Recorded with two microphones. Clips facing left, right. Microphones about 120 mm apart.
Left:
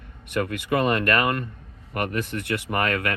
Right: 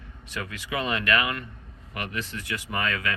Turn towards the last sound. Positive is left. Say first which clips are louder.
# left 5 dB
turn(degrees=60)  # may be behind; listen again after turning